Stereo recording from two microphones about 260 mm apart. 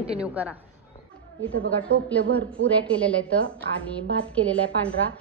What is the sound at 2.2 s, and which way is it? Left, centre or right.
Speech, right.